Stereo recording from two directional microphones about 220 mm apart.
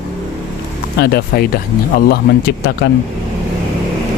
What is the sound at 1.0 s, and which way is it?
Speech, 45° left (ahead or behind).